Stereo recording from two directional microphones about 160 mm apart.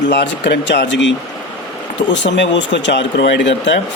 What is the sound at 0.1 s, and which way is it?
Speech, 90° left.